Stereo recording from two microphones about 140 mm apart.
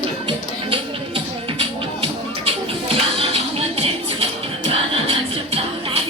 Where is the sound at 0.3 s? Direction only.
40° right (ahead or behind).